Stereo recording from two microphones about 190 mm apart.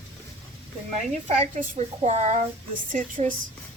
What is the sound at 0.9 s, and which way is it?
A woman's voice, 35° right (ahead or behind).